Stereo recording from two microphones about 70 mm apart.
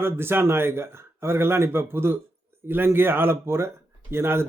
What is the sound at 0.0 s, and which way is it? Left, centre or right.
A man's voice, right.